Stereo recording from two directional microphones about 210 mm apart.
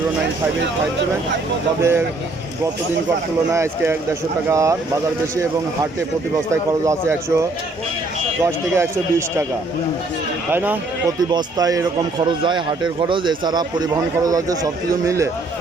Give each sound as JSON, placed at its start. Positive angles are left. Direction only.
{"t": 1.8, "sound": "speech", "side_deg": -10}
{"t": 3.5, "sound": "speech", "side_deg": -15}
{"t": 6.5, "sound": "speech", "side_deg": -15}
{"t": 8.4, "sound": "speech", "side_deg": -15}
{"t": 10.5, "sound": "speech", "side_deg": -10}
{"t": 11.3, "sound": "speech", "side_deg": -20}